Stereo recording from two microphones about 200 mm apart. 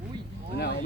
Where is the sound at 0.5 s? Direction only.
55° left (ahead or behind).